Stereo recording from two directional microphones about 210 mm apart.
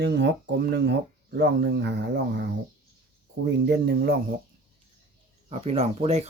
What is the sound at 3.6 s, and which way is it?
Speech, 50° right (ahead or behind).